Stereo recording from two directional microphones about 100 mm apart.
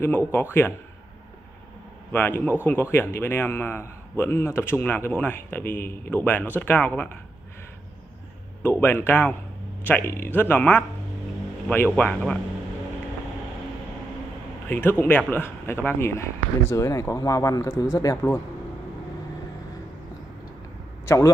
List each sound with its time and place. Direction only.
0.3 s a man's voice: 25° left (ahead or behind)
2.1 s a man's voice: 20° left (ahead or behind)
8.6 s a man's voice: 20° left (ahead or behind)
12.0 s speech: 5° left (ahead or behind)
14.7 s a man's voice: 20° left (ahead or behind)